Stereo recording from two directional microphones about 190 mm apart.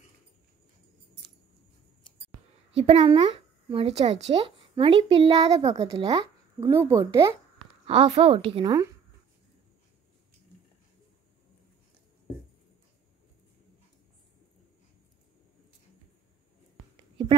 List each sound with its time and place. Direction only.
2.7 s speech: 30° right (ahead or behind)
6.6 s speech: 15° right (ahead or behind)
7.8 s a woman's voice: 30° right (ahead or behind)
16.9 s whispering: 25° right (ahead or behind)